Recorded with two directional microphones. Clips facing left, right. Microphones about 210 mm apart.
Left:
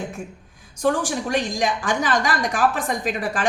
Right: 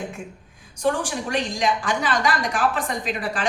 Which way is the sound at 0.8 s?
45° left (ahead or behind).